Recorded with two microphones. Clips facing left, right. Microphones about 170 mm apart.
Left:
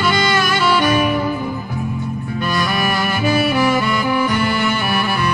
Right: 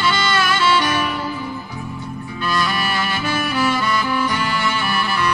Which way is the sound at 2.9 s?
50° left (ahead or behind).